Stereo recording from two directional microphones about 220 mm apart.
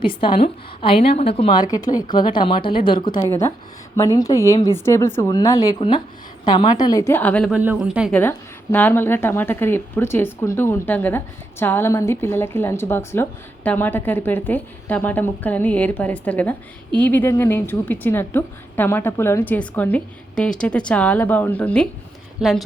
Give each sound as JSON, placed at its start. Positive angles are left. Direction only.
{"t": 0.0, "sound": "a woman's voice", "side_deg": 20}
{"t": 7.5, "sound": "speech", "side_deg": -5}
{"t": 8.2, "sound": "a woman's voice", "side_deg": 10}